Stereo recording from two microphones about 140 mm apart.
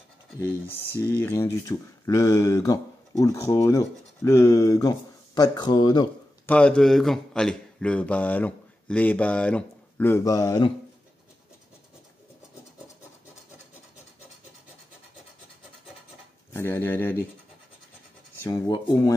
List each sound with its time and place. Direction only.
0.4 s speech: 15° left (ahead or behind); by 6.0 s 30° left (ahead or behind)
6.4 s a man's voice: 10° left (ahead or behind); by 10.7 s 25° left (ahead or behind)
16.5 s speech: 15° left (ahead or behind)
18.7 s speech: 25° left (ahead or behind)